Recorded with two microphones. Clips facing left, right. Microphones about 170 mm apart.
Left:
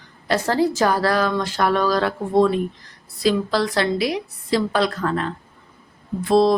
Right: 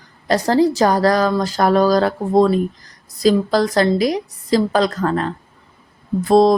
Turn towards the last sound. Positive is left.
turn(degrees=-40)  # may be behind; listen again after turning